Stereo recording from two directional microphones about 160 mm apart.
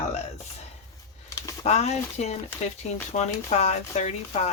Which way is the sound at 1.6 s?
45° left (ahead or behind).